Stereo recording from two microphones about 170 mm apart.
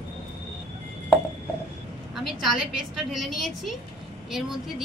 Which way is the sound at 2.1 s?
Centre (ahead or behind).